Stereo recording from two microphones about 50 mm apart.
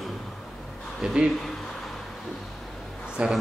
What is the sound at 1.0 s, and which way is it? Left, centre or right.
Speech, centre.